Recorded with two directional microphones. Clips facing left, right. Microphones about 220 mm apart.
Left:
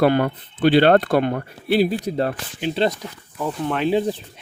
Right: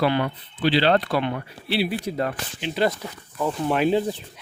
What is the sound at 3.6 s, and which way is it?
Speech, 15° right (ahead or behind).